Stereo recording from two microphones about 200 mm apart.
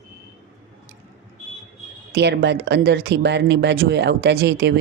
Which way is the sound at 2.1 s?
55° right (ahead or behind).